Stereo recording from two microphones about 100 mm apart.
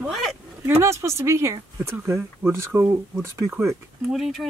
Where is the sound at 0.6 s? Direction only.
25° right (ahead or behind).